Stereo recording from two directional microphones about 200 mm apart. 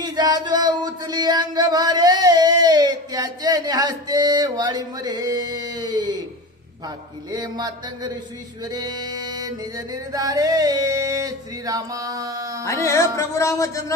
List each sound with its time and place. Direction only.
0.0 s music: 20° right (ahead or behind)
12.6 s speech: 15° left (ahead or behind)